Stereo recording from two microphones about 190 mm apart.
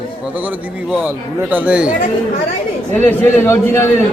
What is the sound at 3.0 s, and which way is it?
Speech, 10° left (ahead or behind).